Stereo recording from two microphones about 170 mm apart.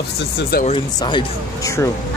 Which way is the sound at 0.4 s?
65° left (ahead or behind).